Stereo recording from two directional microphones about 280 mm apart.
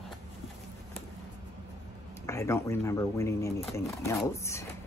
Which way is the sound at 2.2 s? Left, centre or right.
Centre.